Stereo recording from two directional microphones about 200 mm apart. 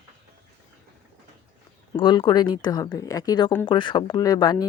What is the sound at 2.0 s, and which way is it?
Speech, 25° left (ahead or behind).